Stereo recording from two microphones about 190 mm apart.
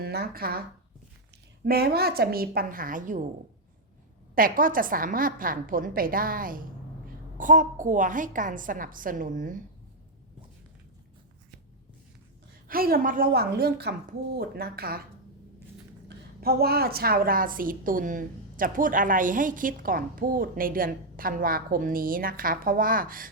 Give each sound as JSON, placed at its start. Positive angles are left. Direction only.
{"t": 0.0, "sound": "speech", "side_deg": -55}
{"t": 1.6, "sound": "a woman's voice", "side_deg": -55}
{"t": 4.4, "sound": "a woman's voice", "side_deg": -50}
{"t": 12.6, "sound": "a woman's voice", "side_deg": -50}
{"t": 16.0, "sound": "a woman's voice", "side_deg": -55}